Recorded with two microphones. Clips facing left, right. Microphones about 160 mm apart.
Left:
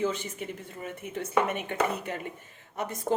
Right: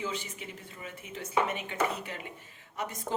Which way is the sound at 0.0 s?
50° left (ahead or behind).